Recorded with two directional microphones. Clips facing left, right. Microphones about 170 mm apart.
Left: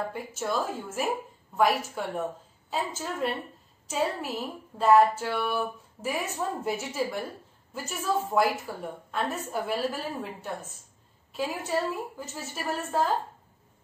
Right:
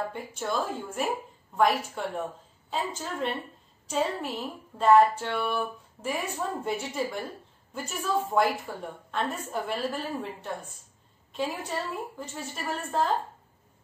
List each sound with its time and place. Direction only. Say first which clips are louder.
0.1 s a woman's voice: left 1 dB; 5° left (ahead or behind)